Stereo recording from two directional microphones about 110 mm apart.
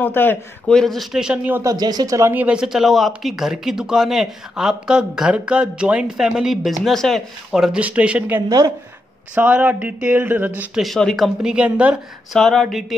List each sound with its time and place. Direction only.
0.0 s a man's voice: 15° left (ahead or behind)
0.7 s speech: 5° left (ahead or behind); by 1.6 s 10° right (ahead or behind)
1.6 s speech: 35° right (ahead or behind)
2.3 s speech: 10° right (ahead or behind)
8.4 s a woman's voice: 30° right (ahead or behind)
9.3 s speech: 15° right (ahead or behind)
10.8 s speech: 5° left (ahead or behind)